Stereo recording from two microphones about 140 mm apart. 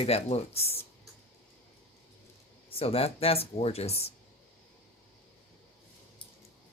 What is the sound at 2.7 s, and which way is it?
Speech, 45° left (ahead or behind).